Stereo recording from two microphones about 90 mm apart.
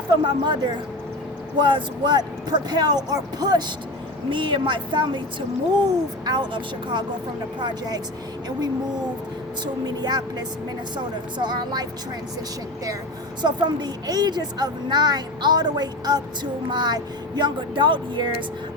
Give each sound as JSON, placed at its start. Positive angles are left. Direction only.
{"t": 0.1, "sound": "a woman's voice", "side_deg": -55}
{"t": 4.3, "sound": "speech", "side_deg": -65}
{"t": 6.2, "sound": "a woman's voice", "side_deg": -55}
{"t": 9.8, "sound": "a woman's voice", "side_deg": -50}
{"t": 13.4, "sound": "a woman's voice", "side_deg": -55}